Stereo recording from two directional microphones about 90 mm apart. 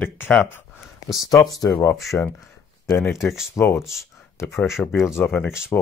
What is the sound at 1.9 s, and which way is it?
Speech, centre (ahead or behind).